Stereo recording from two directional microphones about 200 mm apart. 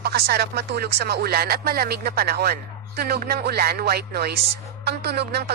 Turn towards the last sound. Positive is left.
turn(degrees=-55)  # may be behind; listen again after turning